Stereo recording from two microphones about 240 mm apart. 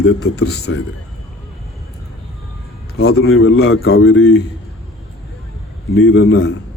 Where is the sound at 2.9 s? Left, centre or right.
Left.